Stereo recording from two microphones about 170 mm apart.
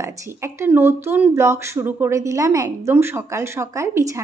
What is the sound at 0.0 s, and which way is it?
A woman's voice, 15° right (ahead or behind).